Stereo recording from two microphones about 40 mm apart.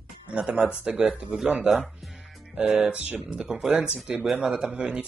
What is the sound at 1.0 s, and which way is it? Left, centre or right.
Speech, right.